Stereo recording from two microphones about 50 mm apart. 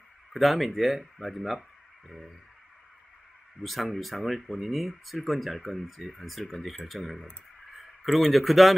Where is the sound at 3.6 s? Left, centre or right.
Centre.